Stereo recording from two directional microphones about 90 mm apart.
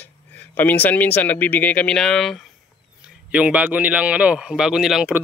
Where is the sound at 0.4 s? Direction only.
20° left (ahead or behind); by 2.4 s 5° left (ahead or behind).